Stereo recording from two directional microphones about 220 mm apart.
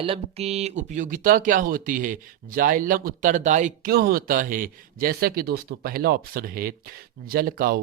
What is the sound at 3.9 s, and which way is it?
Speech, 45° right (ahead or behind).